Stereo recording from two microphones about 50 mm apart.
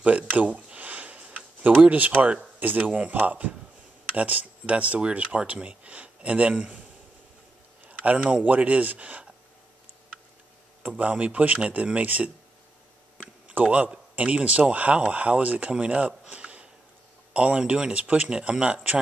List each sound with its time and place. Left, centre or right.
0.0 s a sound: right
2.6 s speech: right
7.8 s speech: right
11.0 s speech: right
13.5 s speech: right
16.3 s a sound: right
17.3 s speech: right